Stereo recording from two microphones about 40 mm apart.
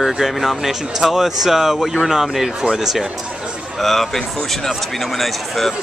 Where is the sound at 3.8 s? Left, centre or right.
Centre.